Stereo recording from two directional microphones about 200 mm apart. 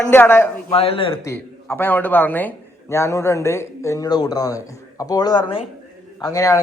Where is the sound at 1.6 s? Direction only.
10° left (ahead or behind).